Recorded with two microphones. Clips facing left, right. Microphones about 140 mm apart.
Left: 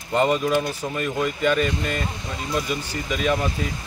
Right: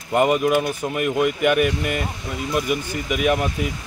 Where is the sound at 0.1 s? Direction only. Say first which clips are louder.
Right 2 dB; 15° right (ahead or behind).